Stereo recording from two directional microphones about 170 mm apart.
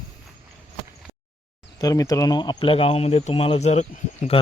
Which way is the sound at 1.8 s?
20° left (ahead or behind).